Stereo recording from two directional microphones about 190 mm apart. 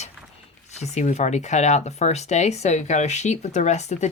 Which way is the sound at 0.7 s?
35° left (ahead or behind).